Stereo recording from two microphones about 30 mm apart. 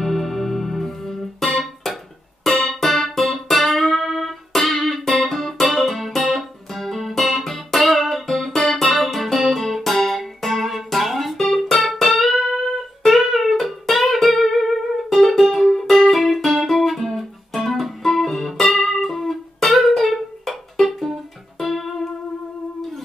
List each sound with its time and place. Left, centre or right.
0.0 s music: centre
2.5 s music: centre
2.8 s music: centre
4.0 s music: centre
4.3 s music: centre
16.2 s music: centre